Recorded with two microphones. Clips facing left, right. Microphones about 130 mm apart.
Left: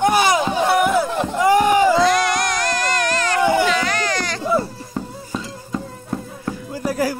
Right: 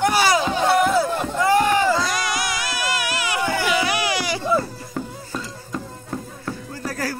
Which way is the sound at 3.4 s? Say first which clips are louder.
Left 8 dB; 20° left (ahead or behind).